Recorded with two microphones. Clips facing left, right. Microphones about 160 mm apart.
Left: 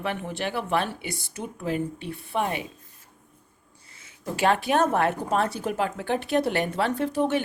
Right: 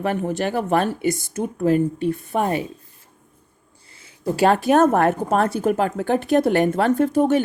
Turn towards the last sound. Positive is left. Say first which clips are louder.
# right 7 dB
turn(degrees=-45)  # may be behind; listen again after turning